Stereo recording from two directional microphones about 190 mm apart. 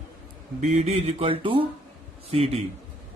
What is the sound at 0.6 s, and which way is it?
Speech, 35° right (ahead or behind).